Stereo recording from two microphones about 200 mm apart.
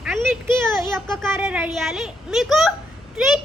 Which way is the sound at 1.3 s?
10° right (ahead or behind).